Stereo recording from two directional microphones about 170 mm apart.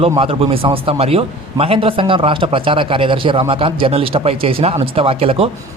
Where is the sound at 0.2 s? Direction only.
35° right (ahead or behind).